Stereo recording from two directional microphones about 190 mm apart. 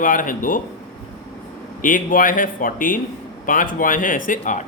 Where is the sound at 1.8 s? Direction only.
45° left (ahead or behind).